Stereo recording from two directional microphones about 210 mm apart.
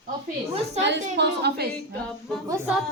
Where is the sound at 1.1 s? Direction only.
55° right (ahead or behind).